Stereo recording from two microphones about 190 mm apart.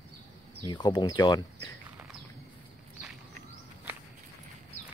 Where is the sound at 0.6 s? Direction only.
20° left (ahead or behind).